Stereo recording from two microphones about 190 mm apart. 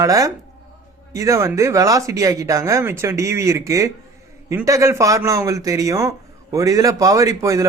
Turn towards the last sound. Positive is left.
turn(degrees=-15)  # may be behind; listen again after turning